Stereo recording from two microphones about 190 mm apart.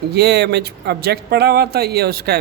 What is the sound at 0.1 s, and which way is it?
A woman's voice, 60° right (ahead or behind).